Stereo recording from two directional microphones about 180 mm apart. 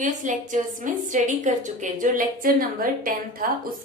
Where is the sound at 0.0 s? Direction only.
45° right (ahead or behind).